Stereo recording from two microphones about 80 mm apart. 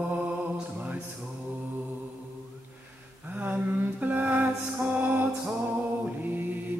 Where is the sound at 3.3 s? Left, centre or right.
Centre.